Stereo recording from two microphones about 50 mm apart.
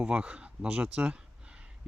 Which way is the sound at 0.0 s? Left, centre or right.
Right.